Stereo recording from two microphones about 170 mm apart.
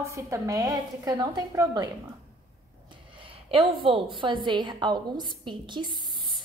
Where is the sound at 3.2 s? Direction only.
30° right (ahead or behind).